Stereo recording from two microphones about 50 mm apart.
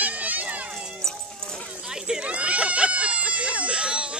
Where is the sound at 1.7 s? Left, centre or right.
Centre.